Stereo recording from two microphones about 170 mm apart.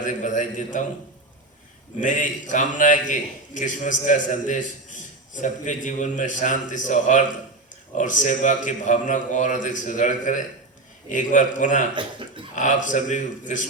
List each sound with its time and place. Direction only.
0.0 s a man's voice: 45° left (ahead or behind)
2.0 s a man's voice: 50° left (ahead or behind)